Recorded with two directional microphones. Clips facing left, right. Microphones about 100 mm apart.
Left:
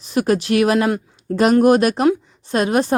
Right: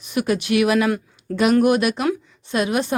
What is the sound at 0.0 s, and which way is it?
A woman's voice, 35° left (ahead or behind).